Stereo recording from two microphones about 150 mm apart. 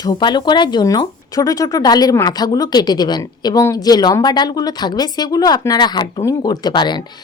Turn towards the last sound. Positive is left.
turn(degrees=30)  # may be behind; listen again after turning